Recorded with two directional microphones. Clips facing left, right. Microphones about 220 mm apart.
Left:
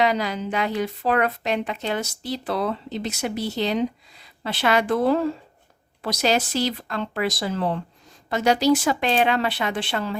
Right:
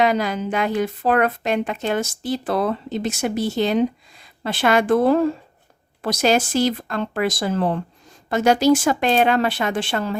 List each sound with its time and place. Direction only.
0.0 s speech: 50° right (ahead or behind)